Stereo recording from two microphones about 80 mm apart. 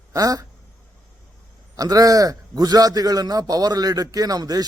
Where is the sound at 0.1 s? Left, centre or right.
Right.